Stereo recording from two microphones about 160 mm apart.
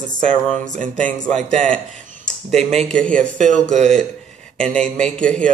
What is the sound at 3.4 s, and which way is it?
Speech, 5° left (ahead or behind).